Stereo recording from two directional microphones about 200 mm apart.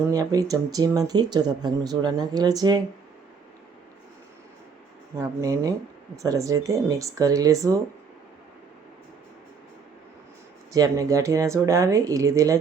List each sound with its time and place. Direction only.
0.1 s speech: 15° right (ahead or behind)
5.1 s speech: 15° right (ahead or behind)
10.7 s speech: 15° right (ahead or behind)